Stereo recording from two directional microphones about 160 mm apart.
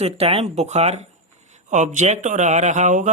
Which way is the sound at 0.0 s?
40° right (ahead or behind).